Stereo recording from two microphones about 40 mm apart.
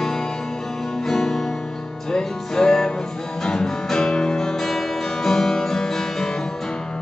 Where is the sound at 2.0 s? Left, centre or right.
Centre.